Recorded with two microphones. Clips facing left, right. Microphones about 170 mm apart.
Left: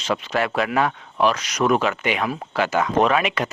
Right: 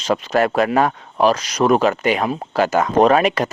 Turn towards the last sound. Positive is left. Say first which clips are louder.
# right 5 dB
turn(degrees=-40)  # may be behind; listen again after turning